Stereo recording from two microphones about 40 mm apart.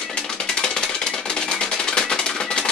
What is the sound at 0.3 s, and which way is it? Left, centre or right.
Music, centre.